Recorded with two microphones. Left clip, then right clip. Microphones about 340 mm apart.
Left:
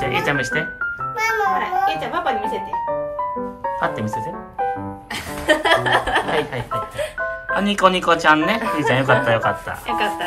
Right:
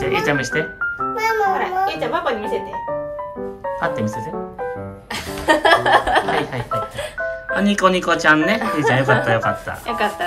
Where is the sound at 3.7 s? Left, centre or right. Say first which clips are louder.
Right 1 dB; centre.